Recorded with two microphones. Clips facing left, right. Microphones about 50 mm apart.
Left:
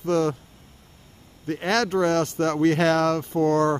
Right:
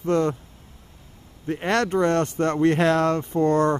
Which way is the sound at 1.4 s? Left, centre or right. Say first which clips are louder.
Right 1 dB; centre.